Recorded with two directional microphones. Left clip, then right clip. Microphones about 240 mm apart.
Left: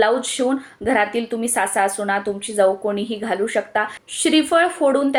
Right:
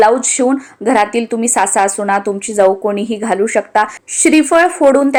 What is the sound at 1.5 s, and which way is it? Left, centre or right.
A woman's voice, right.